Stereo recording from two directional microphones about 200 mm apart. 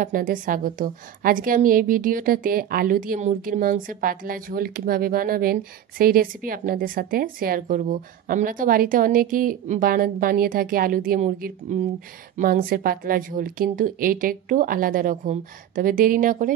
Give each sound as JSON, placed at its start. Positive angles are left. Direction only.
{"t": 0.0, "sound": "a woman's voice", "side_deg": -40}